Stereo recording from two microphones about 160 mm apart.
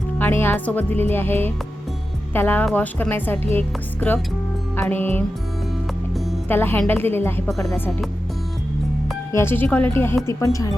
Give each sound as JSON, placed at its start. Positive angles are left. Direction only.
{"t": 0.2, "sound": "speech", "side_deg": 15}
{"t": 6.5, "sound": "speech", "side_deg": 15}
{"t": 7.5, "sound": "speech", "side_deg": 0}
{"t": 9.3, "sound": "speech", "side_deg": 15}